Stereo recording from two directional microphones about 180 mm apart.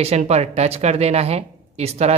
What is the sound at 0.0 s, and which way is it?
Speech, 35° right (ahead or behind).